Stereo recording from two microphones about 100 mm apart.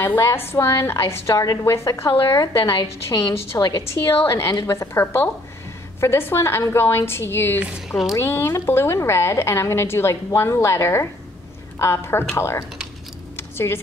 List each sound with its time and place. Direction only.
0.0 s a woman's voice: 25° left (ahead or behind)
2.8 s a woman's voice: 45° left (ahead or behind)
4.5 s a woman's voice: 35° left (ahead or behind)
13.4 s a sound: 25° left (ahead or behind)